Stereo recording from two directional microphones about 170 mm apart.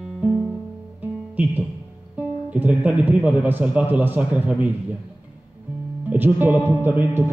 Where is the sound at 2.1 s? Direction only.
10° right (ahead or behind).